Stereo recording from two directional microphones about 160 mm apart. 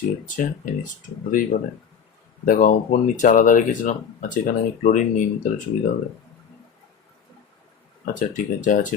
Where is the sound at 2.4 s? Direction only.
55° left (ahead or behind).